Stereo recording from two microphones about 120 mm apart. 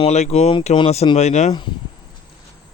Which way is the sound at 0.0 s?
65° left (ahead or behind).